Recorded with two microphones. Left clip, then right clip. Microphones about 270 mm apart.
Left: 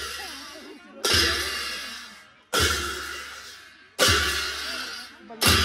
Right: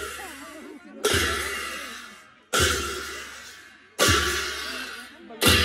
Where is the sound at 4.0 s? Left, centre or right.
Left.